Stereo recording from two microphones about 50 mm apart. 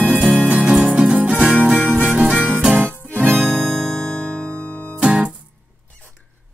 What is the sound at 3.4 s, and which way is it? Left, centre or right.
Music, centre.